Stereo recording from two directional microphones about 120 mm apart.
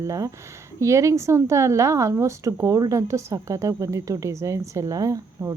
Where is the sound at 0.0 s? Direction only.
25° right (ahead or behind).